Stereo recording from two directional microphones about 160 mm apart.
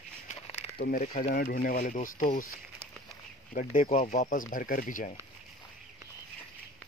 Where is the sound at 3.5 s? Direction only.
55° left (ahead or behind).